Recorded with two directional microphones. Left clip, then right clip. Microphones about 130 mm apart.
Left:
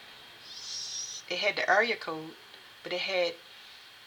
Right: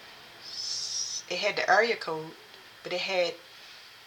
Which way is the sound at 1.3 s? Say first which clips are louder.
Right 1 dB; 25° left (ahead or behind).